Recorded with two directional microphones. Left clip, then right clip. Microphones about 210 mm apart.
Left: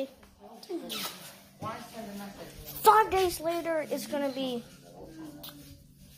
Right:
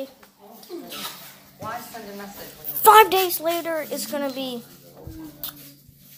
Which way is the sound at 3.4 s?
5° right (ahead or behind).